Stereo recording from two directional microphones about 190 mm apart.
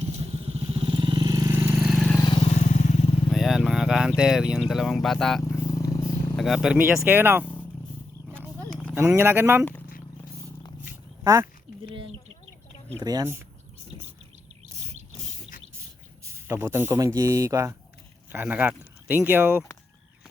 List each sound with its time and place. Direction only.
0.0 s vehicle: 35° right (ahead or behind); by 2.1 s centre (ahead or behind)
2.2 s vehicle: 30° left (ahead or behind)
3.3 s speech: centre (ahead or behind)
5.4 s vehicle: 15° left (ahead or behind)
6.3 s speech: centre (ahead or behind)
7.4 s a sound: 10° left (ahead or behind)
8.3 s wild animals: 10° right (ahead or behind)
9.0 s speech: 15° right (ahead or behind)
11.2 s speech: 15° right (ahead or behind)
13.0 s speech: 20° right (ahead or behind)
16.2 s speech: 10° right (ahead or behind)